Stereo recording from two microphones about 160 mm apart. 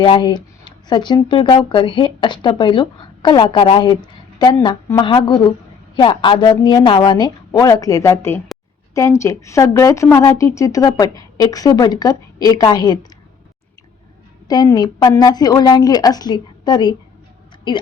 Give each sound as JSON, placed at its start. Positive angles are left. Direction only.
{"t": 0.0, "sound": "speech", "side_deg": 30}
{"t": 14.4, "sound": "speech", "side_deg": 25}